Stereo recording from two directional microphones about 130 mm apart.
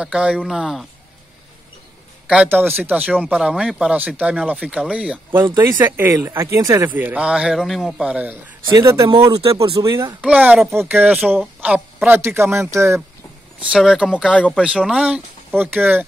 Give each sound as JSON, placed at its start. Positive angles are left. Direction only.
{"t": 0.0, "sound": "speech", "side_deg": -5}
{"t": 2.2, "sound": "speech", "side_deg": -10}
{"t": 8.6, "sound": "speech", "side_deg": -30}
{"t": 8.9, "sound": "speech", "side_deg": -40}
{"t": 10.2, "sound": "a woman's voice", "side_deg": -10}
{"t": 13.6, "sound": "speech", "side_deg": -5}
{"t": 14.2, "sound": "speech", "side_deg": 10}
{"t": 14.6, "sound": "speech", "side_deg": -5}